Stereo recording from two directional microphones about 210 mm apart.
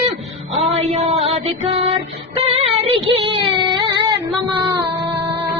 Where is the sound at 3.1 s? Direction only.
25° right (ahead or behind).